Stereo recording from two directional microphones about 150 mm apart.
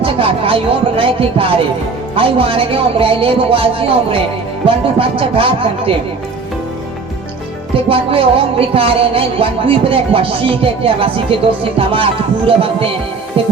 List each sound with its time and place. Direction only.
0.0 s speech: 35° right (ahead or behind)
7.9 s speech: 40° right (ahead or behind)